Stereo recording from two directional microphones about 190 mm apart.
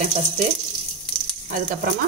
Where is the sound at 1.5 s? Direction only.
40° right (ahead or behind).